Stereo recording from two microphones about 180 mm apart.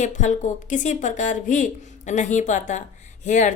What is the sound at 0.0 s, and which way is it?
A woman's voice, 40° left (ahead or behind).